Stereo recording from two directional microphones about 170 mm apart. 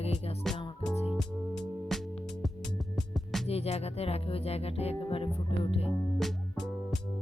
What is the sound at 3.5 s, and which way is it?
Music, 40° left (ahead or behind).